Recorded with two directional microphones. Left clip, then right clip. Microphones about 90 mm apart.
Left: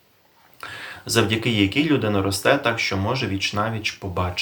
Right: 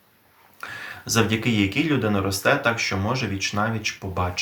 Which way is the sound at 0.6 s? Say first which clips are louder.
Even; 35° left (ahead or behind).